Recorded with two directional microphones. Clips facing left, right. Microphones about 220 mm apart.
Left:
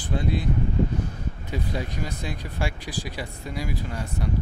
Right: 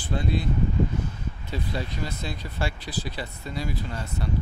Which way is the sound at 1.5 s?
15° left (ahead or behind).